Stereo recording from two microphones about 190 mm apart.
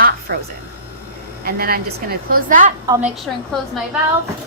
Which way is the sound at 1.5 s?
50° right (ahead or behind).